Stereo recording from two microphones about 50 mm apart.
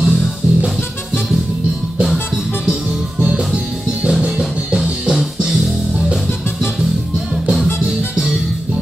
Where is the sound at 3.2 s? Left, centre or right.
Centre.